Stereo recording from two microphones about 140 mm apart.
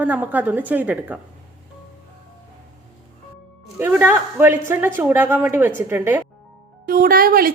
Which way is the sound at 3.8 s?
15° right (ahead or behind).